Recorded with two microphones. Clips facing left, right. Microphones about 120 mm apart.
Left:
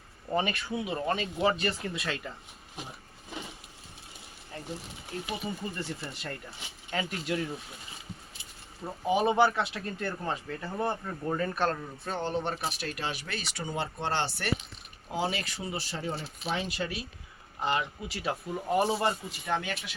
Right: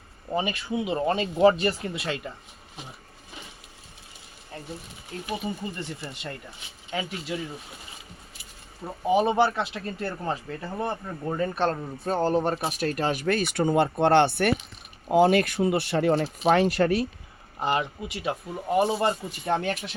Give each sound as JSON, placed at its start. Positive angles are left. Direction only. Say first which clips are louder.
{"t": 0.3, "sound": "speech", "louder": "right 2 dB", "side_deg": -15}
{"t": 0.9, "sound": "speech", "louder": "right 7 dB", "side_deg": -30}
{"t": 5.3, "sound": "speech", "louder": "right 5 dB", "side_deg": -25}
{"t": 6.9, "sound": "speech", "louder": "right 1 dB", "side_deg": -5}
{"t": 9.0, "sound": "speech", "louder": "right 3 dB", "side_deg": -30}
{"t": 17.6, "sound": "speech", "louder": "right 4 dB", "side_deg": -30}
{"t": 18.3, "sound": "speech", "louder": "right 2 dB", "side_deg": -15}
{"t": 18.9, "sound": "speech", "louder": "right 4 dB", "side_deg": -30}